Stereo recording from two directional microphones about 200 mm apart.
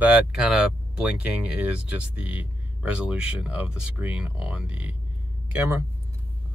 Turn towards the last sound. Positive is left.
turn(degrees=-10)  # may be behind; listen again after turning